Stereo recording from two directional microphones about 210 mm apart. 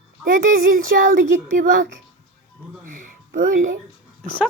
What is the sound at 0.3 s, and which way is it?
Child singing, 40° right (ahead or behind).